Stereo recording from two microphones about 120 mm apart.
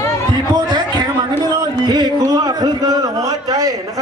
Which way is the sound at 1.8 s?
35° right (ahead or behind).